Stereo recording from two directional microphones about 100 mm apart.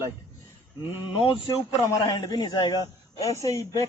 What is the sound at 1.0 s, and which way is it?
Speech, 60° left (ahead or behind).